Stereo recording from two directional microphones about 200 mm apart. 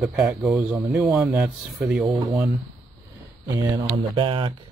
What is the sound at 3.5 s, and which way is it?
Speech, 25° right (ahead or behind).